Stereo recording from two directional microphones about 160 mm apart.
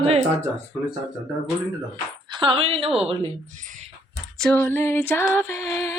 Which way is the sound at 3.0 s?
50° right (ahead or behind).